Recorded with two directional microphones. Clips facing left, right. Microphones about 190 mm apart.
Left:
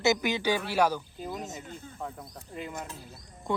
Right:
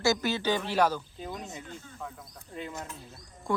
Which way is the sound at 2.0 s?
35° left (ahead or behind).